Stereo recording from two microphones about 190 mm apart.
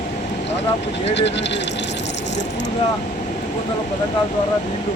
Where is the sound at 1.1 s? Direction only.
65° left (ahead or behind).